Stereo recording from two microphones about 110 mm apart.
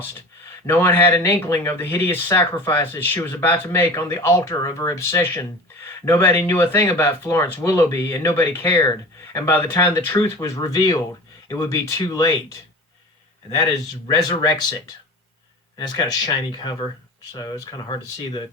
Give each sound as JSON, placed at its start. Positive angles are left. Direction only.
{"t": 0.7, "sound": "speech", "side_deg": 20}
{"t": 14.1, "sound": "speech", "side_deg": 35}
{"t": 15.8, "sound": "speech", "side_deg": 40}